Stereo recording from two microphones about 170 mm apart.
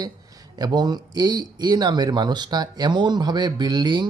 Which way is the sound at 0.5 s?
25° right (ahead or behind).